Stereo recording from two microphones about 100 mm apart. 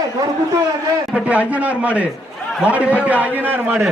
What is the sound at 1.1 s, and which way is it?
A man's voice, 15° right (ahead or behind).